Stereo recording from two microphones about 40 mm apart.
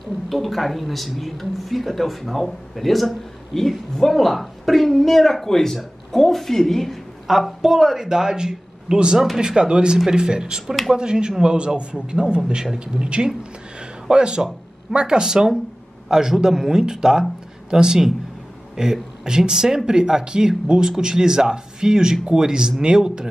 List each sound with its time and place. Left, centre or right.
0.0 s speech: centre
7.2 s speech: centre